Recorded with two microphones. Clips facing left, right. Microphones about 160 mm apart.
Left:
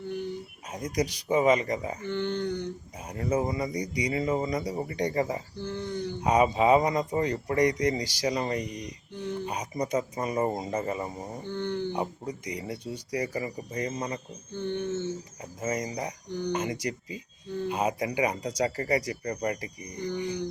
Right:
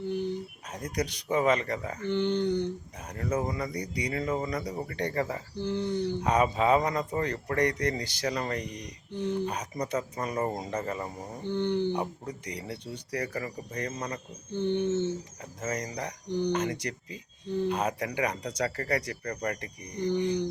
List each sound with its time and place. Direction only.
0.7 s speech: 10° left (ahead or behind)
2.0 s speech: 15° right (ahead or behind)
2.6 s speech: 10° left (ahead or behind)
5.5 s speech: 15° right (ahead or behind)
6.1 s speech: 10° left (ahead or behind)
11.4 s speech: 15° right (ahead or behind)
11.9 s speech: 10° left (ahead or behind)
14.5 s speech: 20° right (ahead or behind)
15.6 s speech: 10° left (ahead or behind)